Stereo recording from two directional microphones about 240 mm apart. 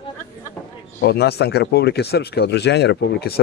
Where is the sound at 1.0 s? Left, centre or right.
Left.